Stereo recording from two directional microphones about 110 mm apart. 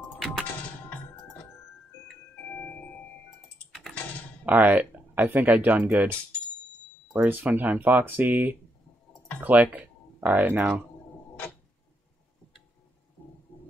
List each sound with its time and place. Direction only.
2.5 s music: 15° left (ahead or behind)
4.5 s speech: 15° right (ahead or behind)
7.2 s speech: 15° right (ahead or behind)